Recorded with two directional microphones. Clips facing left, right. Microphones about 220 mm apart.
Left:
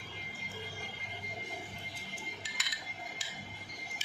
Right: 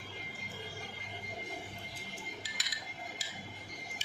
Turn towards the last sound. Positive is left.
turn(degrees=-35)  # may be behind; listen again after turning